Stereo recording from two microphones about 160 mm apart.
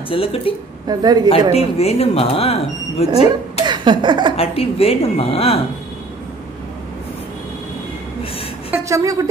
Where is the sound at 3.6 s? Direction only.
30° right (ahead or behind).